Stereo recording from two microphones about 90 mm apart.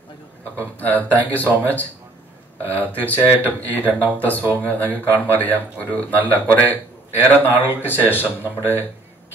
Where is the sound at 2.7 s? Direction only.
20° left (ahead or behind).